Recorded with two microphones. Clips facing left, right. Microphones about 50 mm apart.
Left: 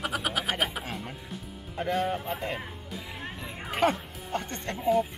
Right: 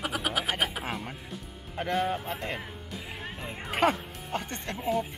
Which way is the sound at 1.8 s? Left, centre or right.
Centre.